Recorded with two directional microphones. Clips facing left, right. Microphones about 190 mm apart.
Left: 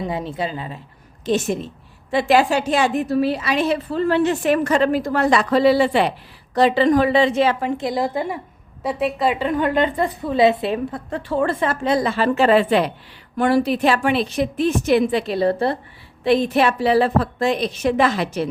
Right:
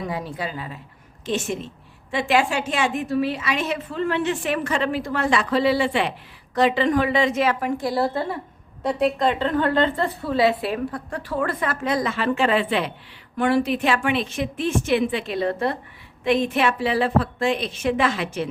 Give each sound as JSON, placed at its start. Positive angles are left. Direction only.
{"t": 0.0, "sound": "a woman's voice", "side_deg": 25}
{"t": 1.2, "sound": "a woman's voice", "side_deg": 40}
{"t": 8.8, "sound": "a woman's voice", "side_deg": 5}